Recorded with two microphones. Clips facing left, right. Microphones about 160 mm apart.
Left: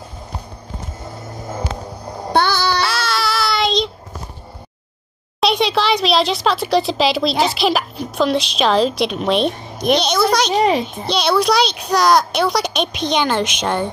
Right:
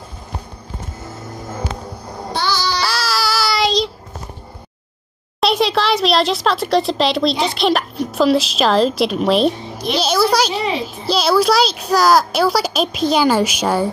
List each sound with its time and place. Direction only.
2.3 s babbling: 55° left (ahead or behind)
2.8 s child singing: centre (ahead or behind)
5.4 s speech: centre (ahead or behind)
10.5 s a child's voice: 45° left (ahead or behind)
11.1 s speech: 5° right (ahead or behind)